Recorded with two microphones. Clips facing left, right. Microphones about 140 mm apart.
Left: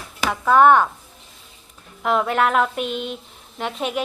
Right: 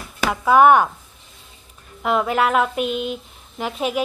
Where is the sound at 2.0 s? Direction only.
Centre (ahead or behind).